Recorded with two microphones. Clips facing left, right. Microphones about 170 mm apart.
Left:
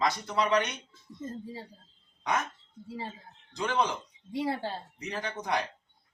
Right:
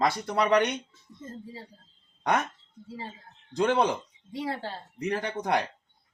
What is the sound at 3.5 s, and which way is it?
Speech, 60° right (ahead or behind).